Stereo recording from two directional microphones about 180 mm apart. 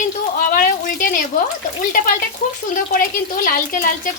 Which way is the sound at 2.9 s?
50° left (ahead or behind).